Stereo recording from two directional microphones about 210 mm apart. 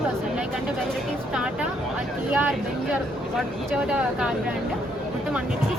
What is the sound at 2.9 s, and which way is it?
Speech, 5° right (ahead or behind).